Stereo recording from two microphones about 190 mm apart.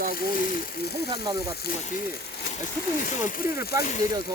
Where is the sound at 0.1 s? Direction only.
50° left (ahead or behind).